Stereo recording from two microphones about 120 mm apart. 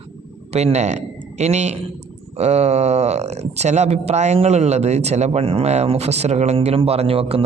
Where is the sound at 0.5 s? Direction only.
65° right (ahead or behind).